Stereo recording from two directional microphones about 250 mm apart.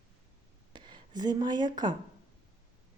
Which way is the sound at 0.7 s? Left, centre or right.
Centre.